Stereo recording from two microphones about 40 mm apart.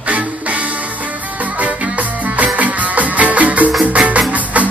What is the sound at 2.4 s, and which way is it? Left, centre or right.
Music, right.